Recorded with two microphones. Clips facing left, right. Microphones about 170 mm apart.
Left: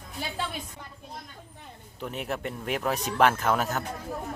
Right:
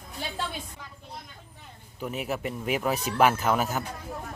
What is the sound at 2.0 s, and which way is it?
Speech, 5° right (ahead or behind).